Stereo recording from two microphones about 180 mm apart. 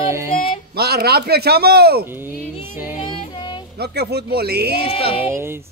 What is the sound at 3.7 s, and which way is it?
Speech, 65° right (ahead or behind).